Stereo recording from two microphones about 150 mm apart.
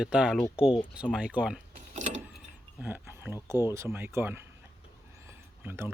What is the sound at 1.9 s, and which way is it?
Vehicle, 55° right (ahead or behind).